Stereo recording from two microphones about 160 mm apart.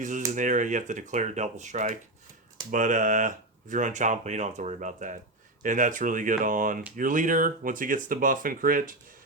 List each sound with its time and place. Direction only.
0.0 s speech: 50° right (ahead or behind)